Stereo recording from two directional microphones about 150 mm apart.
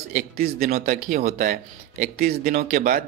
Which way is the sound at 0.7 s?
55° right (ahead or behind).